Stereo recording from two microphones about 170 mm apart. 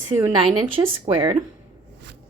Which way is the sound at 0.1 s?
40° right (ahead or behind).